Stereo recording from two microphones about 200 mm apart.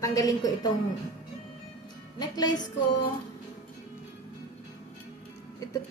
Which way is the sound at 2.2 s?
20° left (ahead or behind).